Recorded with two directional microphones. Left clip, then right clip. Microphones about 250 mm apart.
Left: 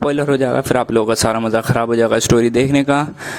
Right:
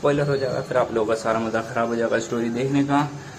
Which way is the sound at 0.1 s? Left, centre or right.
Left.